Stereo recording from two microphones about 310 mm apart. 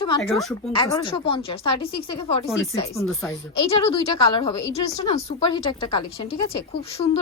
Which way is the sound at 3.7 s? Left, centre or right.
Centre.